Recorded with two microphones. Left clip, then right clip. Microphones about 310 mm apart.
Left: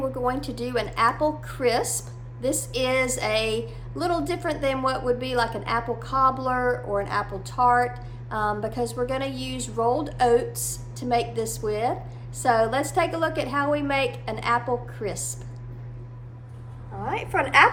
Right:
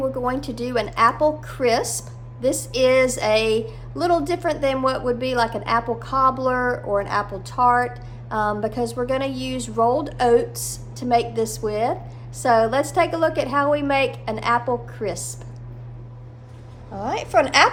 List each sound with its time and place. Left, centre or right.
0.2 s speech: centre
17.1 s speech: centre